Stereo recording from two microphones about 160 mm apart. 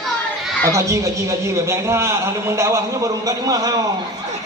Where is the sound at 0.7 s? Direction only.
20° right (ahead or behind).